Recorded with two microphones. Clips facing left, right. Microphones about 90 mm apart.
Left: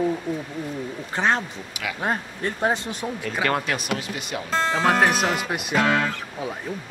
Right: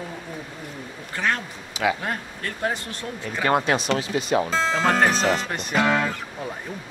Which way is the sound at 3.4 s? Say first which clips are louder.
Right 4 dB; 20° right (ahead or behind).